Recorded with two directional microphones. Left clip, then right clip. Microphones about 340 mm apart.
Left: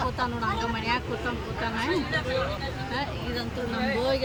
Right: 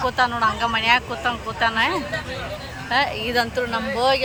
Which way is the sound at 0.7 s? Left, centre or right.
Right.